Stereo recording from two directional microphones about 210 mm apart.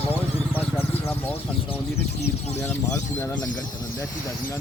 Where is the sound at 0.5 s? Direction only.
10° left (ahead or behind).